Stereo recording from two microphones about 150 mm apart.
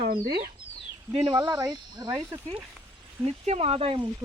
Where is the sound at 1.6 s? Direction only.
25° right (ahead or behind).